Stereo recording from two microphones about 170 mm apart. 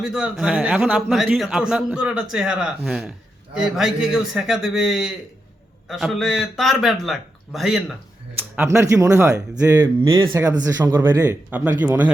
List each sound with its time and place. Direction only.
0.0 s a man's voice: centre (ahead or behind)
8.5 s speech: 15° right (ahead or behind)